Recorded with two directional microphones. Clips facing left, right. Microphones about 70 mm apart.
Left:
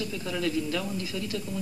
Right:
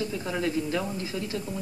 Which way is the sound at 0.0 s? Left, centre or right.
Right.